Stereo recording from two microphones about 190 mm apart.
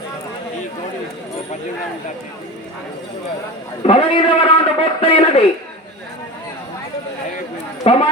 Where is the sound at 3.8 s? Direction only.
30° left (ahead or behind).